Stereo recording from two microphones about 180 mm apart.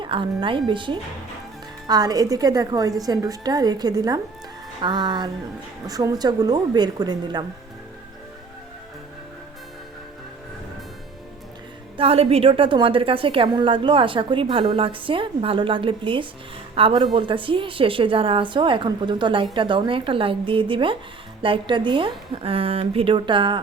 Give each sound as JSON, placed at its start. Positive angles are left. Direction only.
{"t": 0.0, "sound": "a woman's voice", "side_deg": -25}
{"t": 11.9, "sound": "a woman's voice", "side_deg": -35}